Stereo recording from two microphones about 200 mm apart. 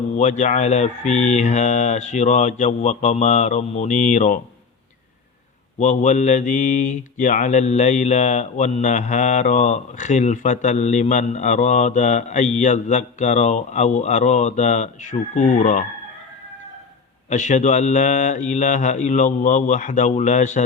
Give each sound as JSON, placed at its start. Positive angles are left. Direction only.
{"t": 0.2, "sound": "speech", "side_deg": 35}
{"t": 5.8, "sound": "speech", "side_deg": 35}
{"t": 17.2, "sound": "speech", "side_deg": 35}